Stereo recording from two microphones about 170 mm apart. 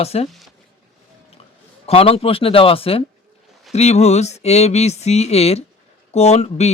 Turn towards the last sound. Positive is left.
turn(degrees=40)  # may be behind; listen again after turning